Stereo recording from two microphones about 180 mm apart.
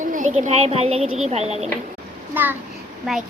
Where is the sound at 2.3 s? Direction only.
10° right (ahead or behind).